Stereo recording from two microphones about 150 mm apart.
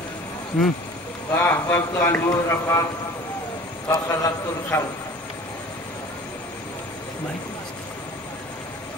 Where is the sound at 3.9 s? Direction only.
25° left (ahead or behind).